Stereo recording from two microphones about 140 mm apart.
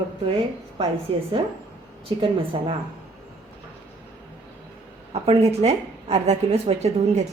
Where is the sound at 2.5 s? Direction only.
35° right (ahead or behind).